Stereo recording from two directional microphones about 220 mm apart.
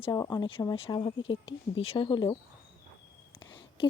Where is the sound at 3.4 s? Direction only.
20° left (ahead or behind).